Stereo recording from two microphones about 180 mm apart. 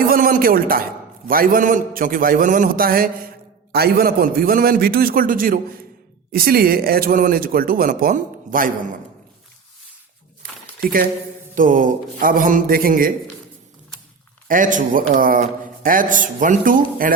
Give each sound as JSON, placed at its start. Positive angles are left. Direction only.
{"t": 0.1, "sound": "a man's voice", "side_deg": -50}
{"t": 10.8, "sound": "speech", "side_deg": -55}
{"t": 14.4, "sound": "speech", "side_deg": -45}